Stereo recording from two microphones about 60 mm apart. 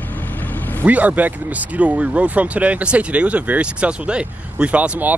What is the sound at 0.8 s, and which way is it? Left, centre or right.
Speech, right.